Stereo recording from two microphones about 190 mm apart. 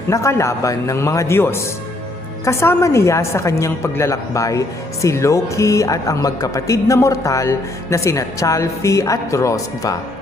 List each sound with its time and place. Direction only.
0.1 s speech: 15° left (ahead or behind)